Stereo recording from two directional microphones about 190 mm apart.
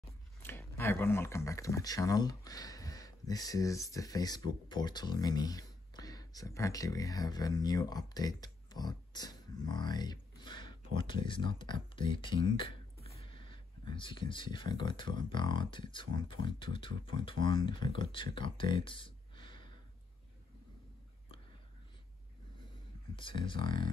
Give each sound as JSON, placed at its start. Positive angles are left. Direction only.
{"t": 0.4, "sound": "speech", "side_deg": 10}
{"t": 23.1, "sound": "speech", "side_deg": 25}